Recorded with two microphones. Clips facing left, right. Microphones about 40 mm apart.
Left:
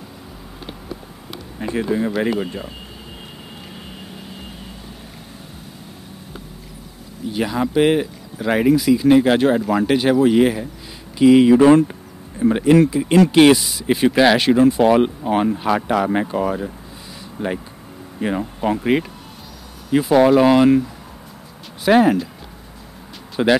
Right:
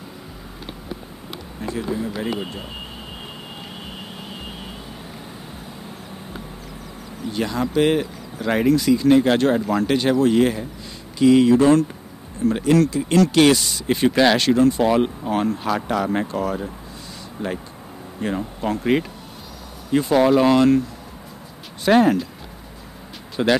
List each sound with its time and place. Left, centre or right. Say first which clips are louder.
1.6 s speech: left 5 dB; left
7.3 s speech: left 2 dB; centre
13.6 s speech: left 2 dB; centre
17.4 s speech: left 3 dB; left
21.8 s speech: left 2 dB; centre
23.4 s speech: left 3 dB; centre